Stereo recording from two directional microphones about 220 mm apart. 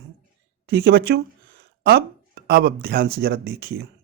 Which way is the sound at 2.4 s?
45° right (ahead or behind).